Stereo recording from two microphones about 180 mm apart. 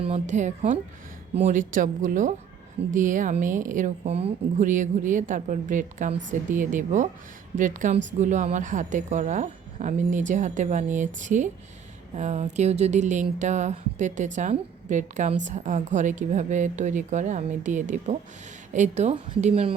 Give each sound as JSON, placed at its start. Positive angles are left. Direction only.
{"t": 0.0, "sound": "a woman's voice", "side_deg": -40}